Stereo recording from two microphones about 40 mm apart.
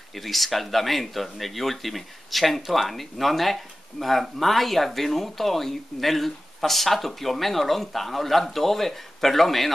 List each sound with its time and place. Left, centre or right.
0.1 s speech: centre